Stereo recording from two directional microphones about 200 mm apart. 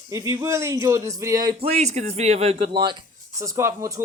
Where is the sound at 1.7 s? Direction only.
35° right (ahead or behind).